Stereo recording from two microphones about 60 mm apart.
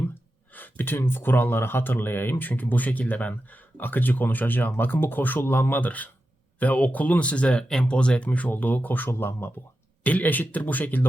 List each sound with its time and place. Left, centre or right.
0.1 s speech: left